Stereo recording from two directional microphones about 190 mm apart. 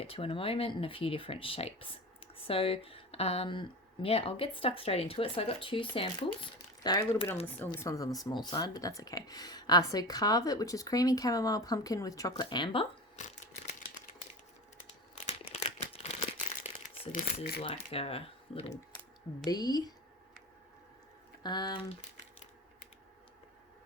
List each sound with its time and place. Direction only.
0.0 s speech: 30° left (ahead or behind)
7.4 s speech: 10° left (ahead or behind); by 13.2 s 30° left (ahead or behind)
15.3 s crumpling: 35° left (ahead or behind)
17.1 s speech: 45° left (ahead or behind)
17.6 s speech: 30° left (ahead or behind)
21.4 s speech: 20° left (ahead or behind)